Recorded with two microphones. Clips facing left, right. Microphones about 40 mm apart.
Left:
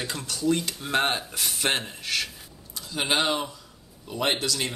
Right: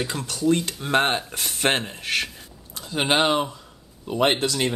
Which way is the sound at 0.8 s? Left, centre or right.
Right.